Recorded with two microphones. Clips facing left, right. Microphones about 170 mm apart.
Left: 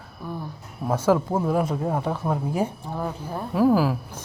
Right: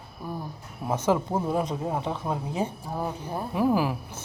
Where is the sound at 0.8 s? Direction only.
10° right (ahead or behind).